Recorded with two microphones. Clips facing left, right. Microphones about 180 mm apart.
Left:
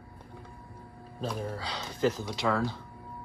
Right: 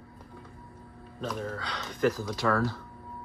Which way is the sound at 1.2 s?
30° left (ahead or behind).